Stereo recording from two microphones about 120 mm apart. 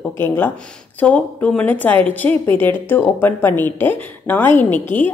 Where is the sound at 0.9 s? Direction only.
10° left (ahead or behind).